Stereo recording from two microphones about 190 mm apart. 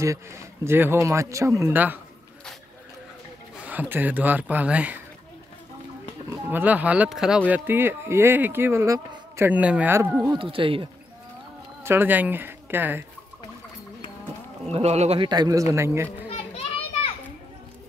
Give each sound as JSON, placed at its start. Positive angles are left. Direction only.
{"t": 0.0, "sound": "speech", "side_deg": -15}
{"t": 3.6, "sound": "speech", "side_deg": -10}
{"t": 6.5, "sound": "speech", "side_deg": -10}
{"t": 11.8, "sound": "speech", "side_deg": -10}
{"t": 14.7, "sound": "speech", "side_deg": -35}